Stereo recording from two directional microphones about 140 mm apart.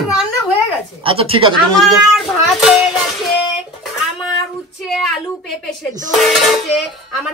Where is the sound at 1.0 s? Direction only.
40° right (ahead or behind).